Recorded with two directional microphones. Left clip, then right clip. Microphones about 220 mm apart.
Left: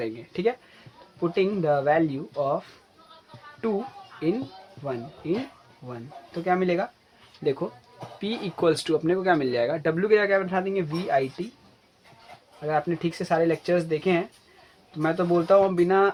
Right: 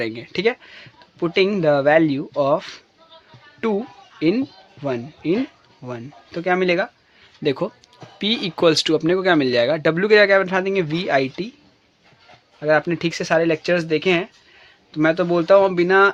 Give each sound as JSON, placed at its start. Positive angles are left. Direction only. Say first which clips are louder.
{"t": 0.0, "sound": "speech", "louder": "right 6 dB", "side_deg": -50}
{"t": 4.8, "sound": "speech", "louder": "right 7 dB", "side_deg": -55}
{"t": 12.6, "sound": "speech", "louder": "right 8 dB", "side_deg": -55}